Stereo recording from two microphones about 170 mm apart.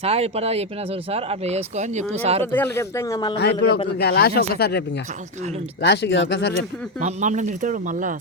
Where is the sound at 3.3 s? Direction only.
80° left.